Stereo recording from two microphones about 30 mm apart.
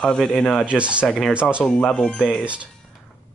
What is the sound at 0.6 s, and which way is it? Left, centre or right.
Speech, right.